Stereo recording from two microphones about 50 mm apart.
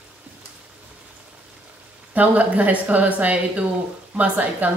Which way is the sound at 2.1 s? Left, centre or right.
Right.